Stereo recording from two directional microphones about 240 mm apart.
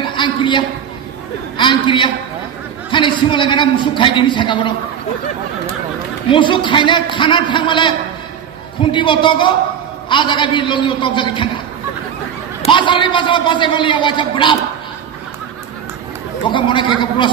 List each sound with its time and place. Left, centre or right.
0.1 s a man's voice: centre
6.3 s a man's voice: left
8.9 s a man's voice: centre
12.6 s a man's voice: centre
16.4 s a man's voice: centre